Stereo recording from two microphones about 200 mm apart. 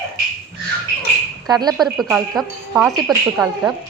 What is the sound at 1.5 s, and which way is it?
Speech, 20° right (ahead or behind).